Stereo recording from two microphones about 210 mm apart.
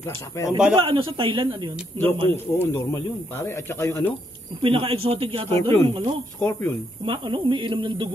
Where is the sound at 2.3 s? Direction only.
10° left (ahead or behind).